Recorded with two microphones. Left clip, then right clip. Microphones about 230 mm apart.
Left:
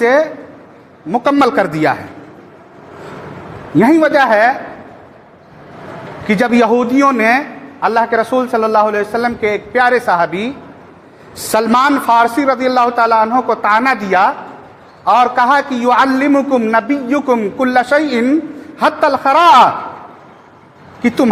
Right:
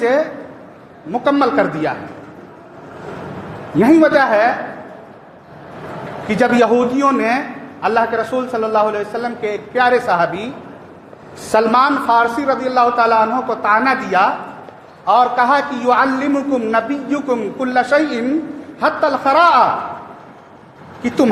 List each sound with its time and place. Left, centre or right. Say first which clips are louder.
0.0 s a man's voice: left 4 dB; left
3.8 s a man's voice: left 1 dB; left
6.2 s a man's voice: left 1 dB; left
11.5 s a man's voice: left 1 dB; left